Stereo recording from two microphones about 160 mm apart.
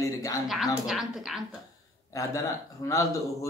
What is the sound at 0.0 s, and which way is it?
Speech, 20° left (ahead or behind).